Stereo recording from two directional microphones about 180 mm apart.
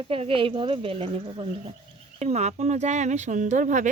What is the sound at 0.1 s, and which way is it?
Speech, 30° right (ahead or behind).